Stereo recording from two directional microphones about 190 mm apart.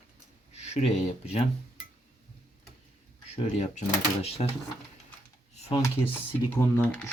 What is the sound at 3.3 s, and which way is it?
Speech, 40° left (ahead or behind).